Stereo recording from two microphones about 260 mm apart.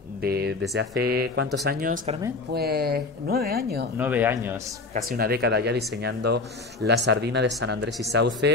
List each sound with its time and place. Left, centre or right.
0.2 s speech: right
4.0 s speech: centre
4.9 s speech: right